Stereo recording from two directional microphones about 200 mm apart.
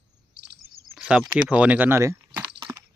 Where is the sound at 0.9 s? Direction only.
5° right (ahead or behind).